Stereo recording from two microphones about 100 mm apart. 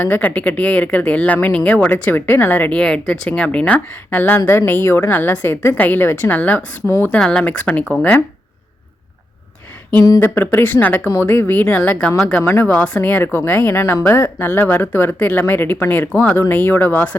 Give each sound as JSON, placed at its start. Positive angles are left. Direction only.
{"t": 0.0, "sound": "speech", "side_deg": 15}
{"t": 7.2, "sound": "speech", "side_deg": 10}
{"t": 10.2, "sound": "speech", "side_deg": 20}